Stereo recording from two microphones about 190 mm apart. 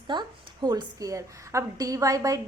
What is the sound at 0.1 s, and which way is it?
A woman's voice, 20° right (ahead or behind).